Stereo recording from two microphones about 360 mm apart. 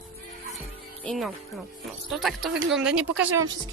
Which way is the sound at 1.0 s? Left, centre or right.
Centre.